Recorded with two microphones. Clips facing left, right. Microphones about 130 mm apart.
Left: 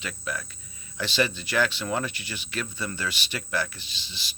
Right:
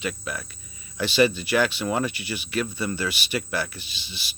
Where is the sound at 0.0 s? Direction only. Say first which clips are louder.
Right 3 dB; 15° right (ahead or behind).